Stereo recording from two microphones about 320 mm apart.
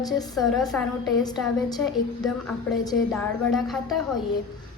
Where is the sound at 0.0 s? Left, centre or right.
Centre.